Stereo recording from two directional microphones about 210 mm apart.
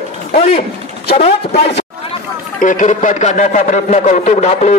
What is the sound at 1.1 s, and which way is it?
Speech, 30° left (ahead or behind).